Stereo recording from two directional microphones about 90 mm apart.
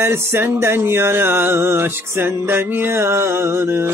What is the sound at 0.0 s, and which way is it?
Music, 25° right (ahead or behind).